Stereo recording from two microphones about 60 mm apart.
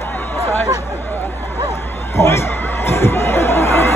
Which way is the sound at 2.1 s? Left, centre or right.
Left.